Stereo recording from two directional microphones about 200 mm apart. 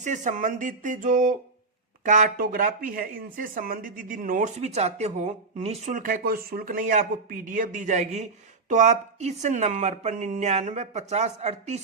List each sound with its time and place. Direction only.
0.0 s speech: 35° right (ahead or behind)